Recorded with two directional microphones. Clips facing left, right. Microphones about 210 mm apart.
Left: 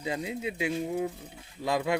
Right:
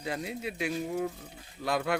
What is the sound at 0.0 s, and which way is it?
Speech, 20° left (ahead or behind).